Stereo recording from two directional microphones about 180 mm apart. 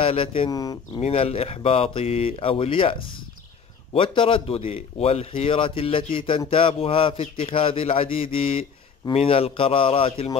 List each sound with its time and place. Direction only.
0.0 s speech: 30° left (ahead or behind)
1.0 s a man's voice: 30° left (ahead or behind)